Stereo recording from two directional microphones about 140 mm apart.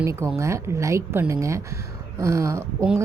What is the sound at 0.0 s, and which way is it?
A woman's voice, 20° right (ahead or behind).